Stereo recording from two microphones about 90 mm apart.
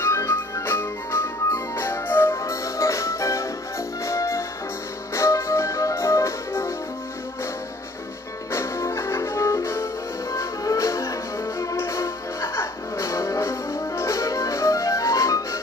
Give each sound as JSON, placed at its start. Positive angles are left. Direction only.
{"t": 0.0, "sound": "music", "side_deg": 30}
{"t": 8.5, "sound": "music", "side_deg": 30}